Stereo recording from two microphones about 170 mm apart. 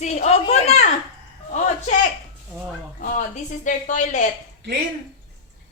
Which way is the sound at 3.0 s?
50° left (ahead or behind).